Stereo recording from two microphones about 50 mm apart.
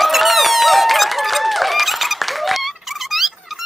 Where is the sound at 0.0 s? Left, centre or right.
Centre.